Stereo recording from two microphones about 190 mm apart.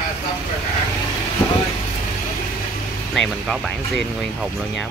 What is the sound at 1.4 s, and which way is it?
Vehicle, 20° left (ahead or behind).